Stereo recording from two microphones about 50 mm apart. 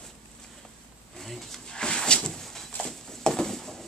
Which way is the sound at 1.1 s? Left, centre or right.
Centre.